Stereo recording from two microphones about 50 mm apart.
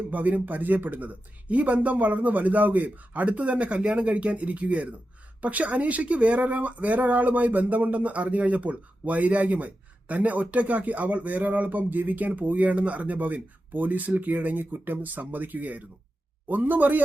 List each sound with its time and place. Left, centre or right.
0.1 s speech: right